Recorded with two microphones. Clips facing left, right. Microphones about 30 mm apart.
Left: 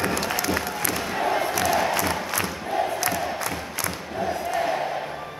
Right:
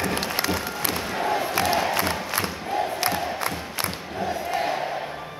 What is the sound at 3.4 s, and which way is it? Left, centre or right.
Crowd, right.